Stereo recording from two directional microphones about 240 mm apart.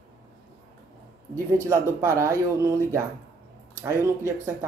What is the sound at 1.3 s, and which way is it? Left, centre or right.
Speech, centre.